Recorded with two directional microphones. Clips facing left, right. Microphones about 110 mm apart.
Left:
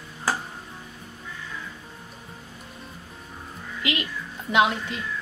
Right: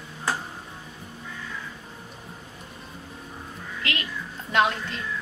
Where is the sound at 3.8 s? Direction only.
15° left (ahead or behind).